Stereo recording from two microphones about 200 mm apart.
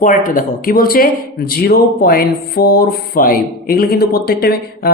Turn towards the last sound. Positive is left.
turn(degrees=50)  # may be behind; listen again after turning